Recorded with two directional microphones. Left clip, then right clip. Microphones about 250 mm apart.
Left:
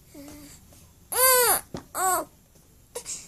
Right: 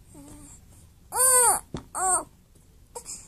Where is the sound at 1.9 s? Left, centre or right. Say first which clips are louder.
Left 1 dB; centre.